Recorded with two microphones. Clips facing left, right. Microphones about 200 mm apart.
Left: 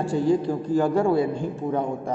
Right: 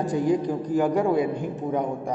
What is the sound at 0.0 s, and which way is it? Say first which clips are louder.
A man's voice: left 1 dB; 15° right (ahead or behind).